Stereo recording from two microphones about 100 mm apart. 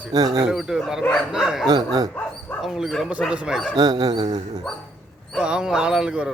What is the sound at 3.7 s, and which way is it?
Speech, 45° right (ahead or behind).